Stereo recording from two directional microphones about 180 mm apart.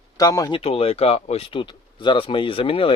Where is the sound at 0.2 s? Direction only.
20° left (ahead or behind).